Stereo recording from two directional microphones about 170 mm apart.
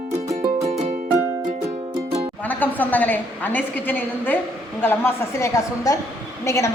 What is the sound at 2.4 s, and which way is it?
A woman's voice, 10° left (ahead or behind).